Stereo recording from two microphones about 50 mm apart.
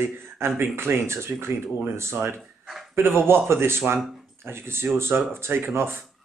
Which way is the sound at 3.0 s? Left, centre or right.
Right.